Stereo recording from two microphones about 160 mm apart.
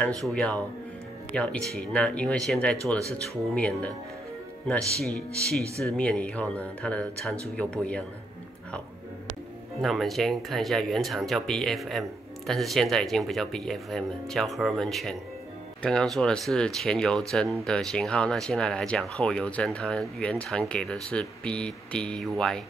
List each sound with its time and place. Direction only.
0.0 s speech: 5° left (ahead or behind)
9.8 s speech: centre (ahead or behind)